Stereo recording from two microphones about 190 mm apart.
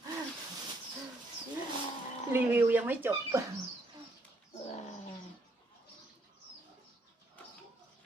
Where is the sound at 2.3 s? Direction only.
10° right (ahead or behind).